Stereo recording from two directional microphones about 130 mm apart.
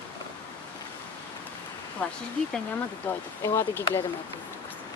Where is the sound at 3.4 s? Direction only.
20° left (ahead or behind).